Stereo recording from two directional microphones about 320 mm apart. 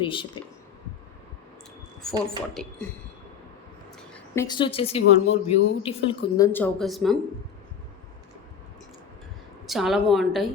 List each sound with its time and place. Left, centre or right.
0.0 s a woman's voice: centre
2.0 s speech: centre
4.4 s a woman's voice: centre
9.6 s a woman's voice: centre